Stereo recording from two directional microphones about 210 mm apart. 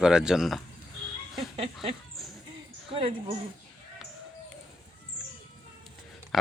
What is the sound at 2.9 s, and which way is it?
Speech, 25° right (ahead or behind).